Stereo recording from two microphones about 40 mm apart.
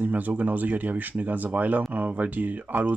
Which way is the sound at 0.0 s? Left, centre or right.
Right.